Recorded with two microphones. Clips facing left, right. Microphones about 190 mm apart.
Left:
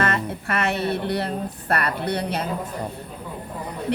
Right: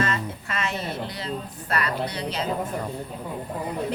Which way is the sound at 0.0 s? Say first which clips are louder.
Left 3 dB; 60° left (ahead or behind).